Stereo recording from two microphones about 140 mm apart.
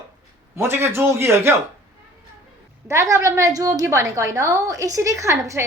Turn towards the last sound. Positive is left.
turn(degrees=-20)  # may be behind; listen again after turning